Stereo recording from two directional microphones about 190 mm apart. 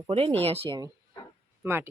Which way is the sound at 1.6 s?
10° right (ahead or behind).